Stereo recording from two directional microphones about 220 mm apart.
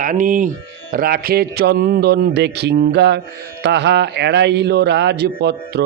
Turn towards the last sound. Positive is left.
turn(degrees=-50)  # may be behind; listen again after turning